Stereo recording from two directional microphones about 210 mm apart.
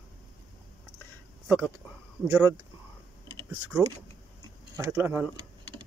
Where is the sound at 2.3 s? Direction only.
15° right (ahead or behind).